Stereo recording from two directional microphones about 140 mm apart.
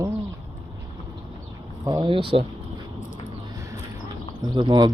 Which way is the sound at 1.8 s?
30° right (ahead or behind).